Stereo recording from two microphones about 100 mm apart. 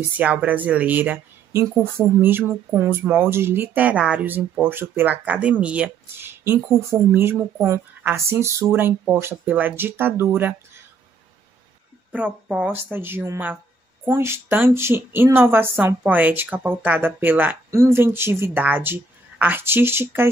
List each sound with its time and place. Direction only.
0.2 s speech: 15° right (ahead or behind)
6.1 s speech: 25° right (ahead or behind)
12.1 s speech: 15° right (ahead or behind)